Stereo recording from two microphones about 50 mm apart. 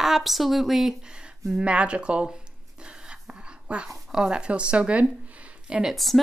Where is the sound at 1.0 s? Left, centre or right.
Centre.